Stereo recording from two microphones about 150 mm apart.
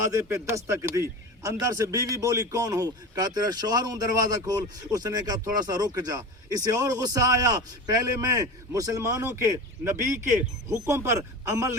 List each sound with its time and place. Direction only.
0.0 s a man's voice: 20° right (ahead or behind)